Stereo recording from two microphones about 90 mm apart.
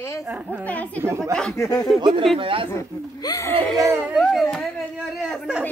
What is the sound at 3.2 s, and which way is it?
Speech, 40° left (ahead or behind).